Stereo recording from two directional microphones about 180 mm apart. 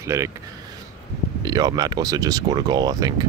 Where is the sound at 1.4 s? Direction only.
20° right (ahead or behind).